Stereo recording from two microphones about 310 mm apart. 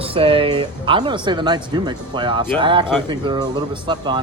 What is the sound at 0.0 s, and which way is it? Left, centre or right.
Speech, centre.